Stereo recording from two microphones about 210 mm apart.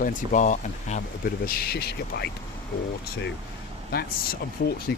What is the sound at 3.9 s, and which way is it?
Speech, 45° left (ahead or behind).